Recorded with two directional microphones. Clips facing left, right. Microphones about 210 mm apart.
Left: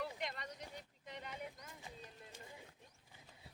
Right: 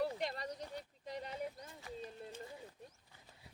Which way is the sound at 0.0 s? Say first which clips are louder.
Right 6 dB; 35° right (ahead or behind).